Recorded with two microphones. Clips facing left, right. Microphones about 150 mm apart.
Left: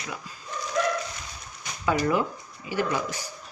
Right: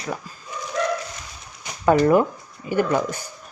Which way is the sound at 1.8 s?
45° right (ahead or behind).